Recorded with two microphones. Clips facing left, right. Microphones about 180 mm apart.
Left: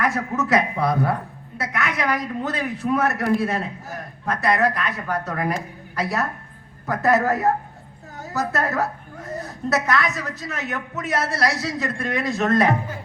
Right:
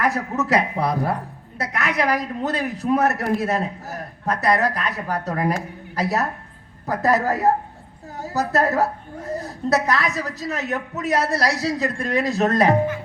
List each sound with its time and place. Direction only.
0.0 s a woman's voice: 35° right (ahead or behind)